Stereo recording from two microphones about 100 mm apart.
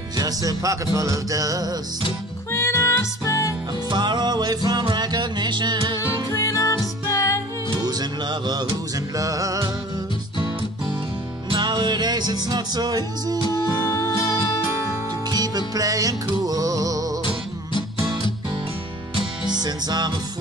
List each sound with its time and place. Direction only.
0.2 s music: 35° right (ahead or behind)
2.5 s music: 30° left (ahead or behind)
3.9 s music: 45° right (ahead or behind)
6.3 s music: 35° left (ahead or behind)
7.7 s music: 45° right (ahead or behind)
11.5 s music: 50° right (ahead or behind)
13.5 s music: 30° left (ahead or behind)
15.3 s music: 40° right (ahead or behind)
19.4 s music: 45° right (ahead or behind)